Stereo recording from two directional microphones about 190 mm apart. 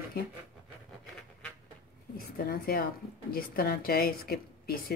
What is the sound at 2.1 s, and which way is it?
A woman's voice, 55° left (ahead or behind).